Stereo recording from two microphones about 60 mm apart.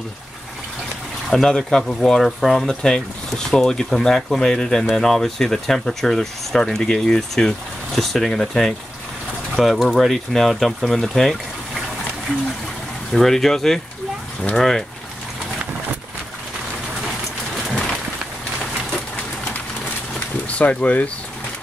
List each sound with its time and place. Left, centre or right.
1.3 s speech: centre
13.1 s speech: centre
20.2 s a sound: left